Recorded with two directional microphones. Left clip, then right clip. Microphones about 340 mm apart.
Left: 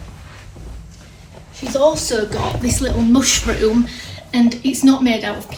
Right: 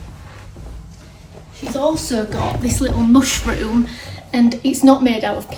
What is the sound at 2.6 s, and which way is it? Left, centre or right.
Speech, centre.